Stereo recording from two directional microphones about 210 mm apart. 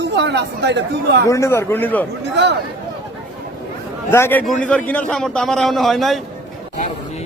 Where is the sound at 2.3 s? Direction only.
55° right (ahead or behind).